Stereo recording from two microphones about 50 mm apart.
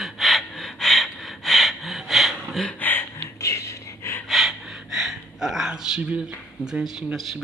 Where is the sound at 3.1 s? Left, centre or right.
Left.